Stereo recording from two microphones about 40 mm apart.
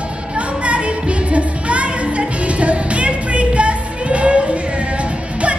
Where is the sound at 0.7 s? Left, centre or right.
Right.